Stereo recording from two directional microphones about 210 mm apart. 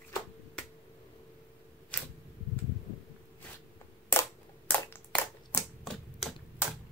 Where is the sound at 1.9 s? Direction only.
5° left (ahead or behind).